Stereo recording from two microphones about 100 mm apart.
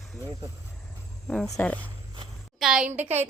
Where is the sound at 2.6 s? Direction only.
5° right (ahead or behind).